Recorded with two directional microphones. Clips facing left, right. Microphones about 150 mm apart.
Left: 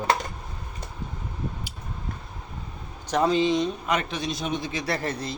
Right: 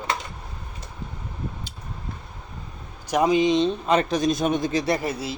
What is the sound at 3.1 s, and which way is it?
A man's voice, 15° right (ahead or behind).